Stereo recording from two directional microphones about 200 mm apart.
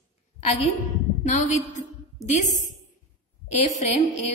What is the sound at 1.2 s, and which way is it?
Speech, 40° left (ahead or behind).